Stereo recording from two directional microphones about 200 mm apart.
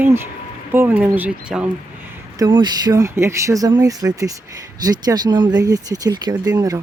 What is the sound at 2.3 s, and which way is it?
Speech, 20° right (ahead or behind).